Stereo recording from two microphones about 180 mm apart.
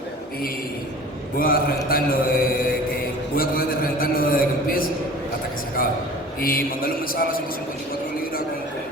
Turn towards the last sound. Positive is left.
turn(degrees=55)  # may be behind; listen again after turning